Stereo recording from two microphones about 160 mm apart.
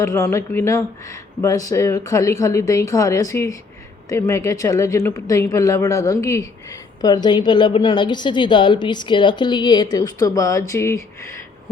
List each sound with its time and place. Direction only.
0.0 s a woman's voice: 20° left (ahead or behind)